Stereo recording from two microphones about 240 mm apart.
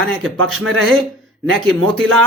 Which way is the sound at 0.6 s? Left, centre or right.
Right.